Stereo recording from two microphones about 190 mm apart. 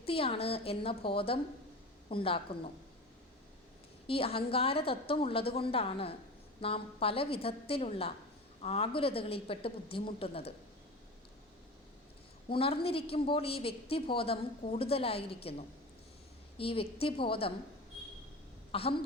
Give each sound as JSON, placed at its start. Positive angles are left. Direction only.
{"t": 0.0, "sound": "a woman's voice", "side_deg": 30}
{"t": 4.0, "sound": "a woman's voice", "side_deg": 30}
{"t": 12.5, "sound": "a woman's voice", "side_deg": 30}
{"t": 16.6, "sound": "a woman's voice", "side_deg": 30}
{"t": 18.7, "sound": "a woman's voice", "side_deg": 30}